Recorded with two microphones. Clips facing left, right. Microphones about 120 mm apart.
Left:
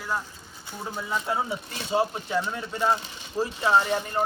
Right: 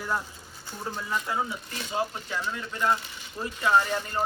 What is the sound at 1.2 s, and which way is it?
Speech, 25° left (ahead or behind).